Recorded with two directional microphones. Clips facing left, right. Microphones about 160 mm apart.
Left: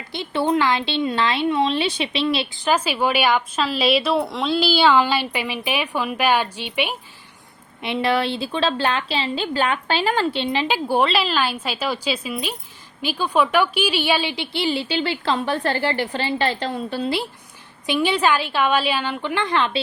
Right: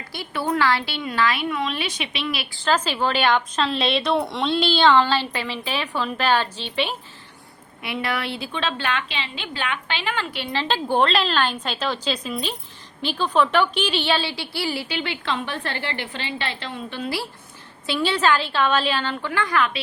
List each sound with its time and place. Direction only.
0.1 s a woman's voice: 25° left (ahead or behind)
2.6 s a woman's voice: 10° left (ahead or behind)
7.8 s a woman's voice: 25° left (ahead or behind)
10.5 s a woman's voice: 15° left (ahead or behind); by 17.1 s 35° left (ahead or behind)
17.8 s a woman's voice: 15° left (ahead or behind)